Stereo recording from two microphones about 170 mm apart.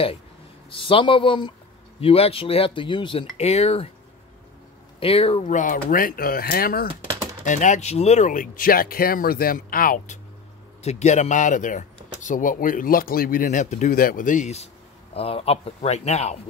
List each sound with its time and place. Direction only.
0.7 s speech: 30° left (ahead or behind)
5.0 s speech: 35° left (ahead or behind); by 6.9 s 60° left (ahead or behind)
7.4 s speech: 45° left (ahead or behind)
10.8 s speech: 40° left (ahead or behind)